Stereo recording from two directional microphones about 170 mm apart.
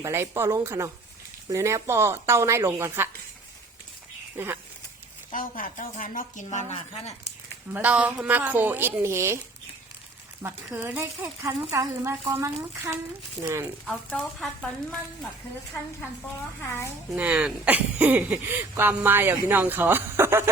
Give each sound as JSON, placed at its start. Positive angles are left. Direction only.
{"t": 0.0, "sound": "speech", "side_deg": -15}
{"t": 4.4, "sound": "speech", "side_deg": -15}
{"t": 5.3, "sound": "speech", "side_deg": 55}
{"t": 6.7, "sound": "speech", "side_deg": 40}
{"t": 7.7, "sound": "speech", "side_deg": -10}
{"t": 10.4, "sound": "speech", "side_deg": -15}
{"t": 13.8, "sound": "speech", "side_deg": 0}
{"t": 16.6, "sound": "a child's voice", "side_deg": 15}
{"t": 17.1, "sound": "speech", "side_deg": -5}